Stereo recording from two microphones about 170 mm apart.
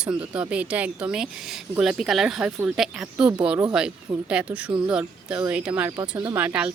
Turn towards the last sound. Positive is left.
turn(degrees=-10)  # may be behind; listen again after turning